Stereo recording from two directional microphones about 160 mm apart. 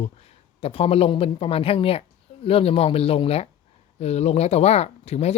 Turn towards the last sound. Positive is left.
turn(degrees=40)  # may be behind; listen again after turning